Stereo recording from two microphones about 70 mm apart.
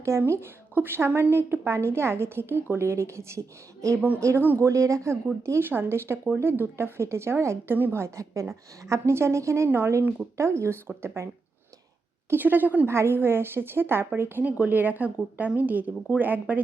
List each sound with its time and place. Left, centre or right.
0.3 s a woman's voice: right
8.0 s a woman's voice: right
9.6 s a woman's voice: right
12.3 s a woman's voice: right
12.9 s a woman's voice: right